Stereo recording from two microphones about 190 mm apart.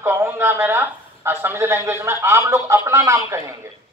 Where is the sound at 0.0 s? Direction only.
10° right (ahead or behind).